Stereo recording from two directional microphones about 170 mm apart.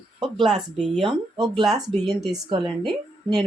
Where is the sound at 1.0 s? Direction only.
25° right (ahead or behind).